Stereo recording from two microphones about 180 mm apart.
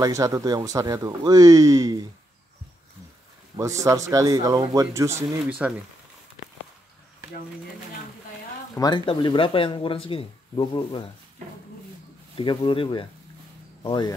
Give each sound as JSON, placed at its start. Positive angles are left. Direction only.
{"t": 0.0, "sound": "speech", "side_deg": -20}
{"t": 3.5, "sound": "speech", "side_deg": -15}
{"t": 8.7, "sound": "speech", "side_deg": 25}
{"t": 12.4, "sound": "speech", "side_deg": 30}